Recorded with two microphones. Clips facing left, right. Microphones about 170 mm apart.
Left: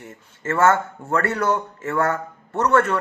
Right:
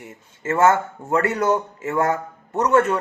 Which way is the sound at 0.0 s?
15° right (ahead or behind).